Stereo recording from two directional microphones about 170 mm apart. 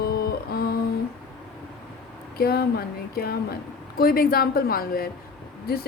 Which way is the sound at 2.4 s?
65° left (ahead or behind).